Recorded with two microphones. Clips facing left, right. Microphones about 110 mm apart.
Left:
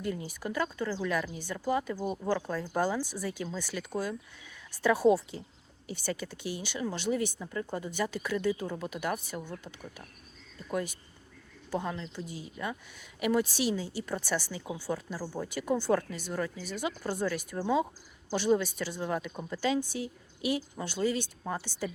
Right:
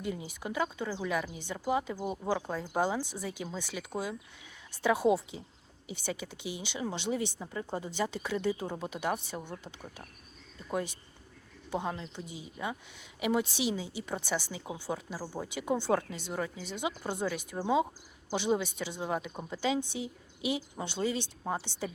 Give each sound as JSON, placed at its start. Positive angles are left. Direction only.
{"t": 0.0, "sound": "speech", "side_deg": -20}
{"t": 10.7, "sound": "speech", "side_deg": -25}